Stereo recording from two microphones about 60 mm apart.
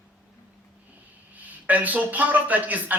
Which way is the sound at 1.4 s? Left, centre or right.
Right.